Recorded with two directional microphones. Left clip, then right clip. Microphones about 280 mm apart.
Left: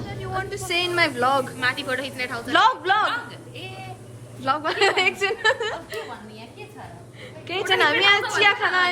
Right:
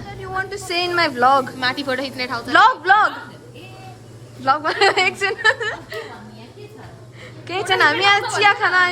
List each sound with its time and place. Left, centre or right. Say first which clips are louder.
0.2 s a woman's voice: right 4 dB; centre
1.5 s a woman's voice: right 3 dB; right
2.5 s a woman's voice: right 6 dB; centre
4.4 s a woman's voice: right 5 dB; centre
7.7 s a woman's voice: right 3 dB; centre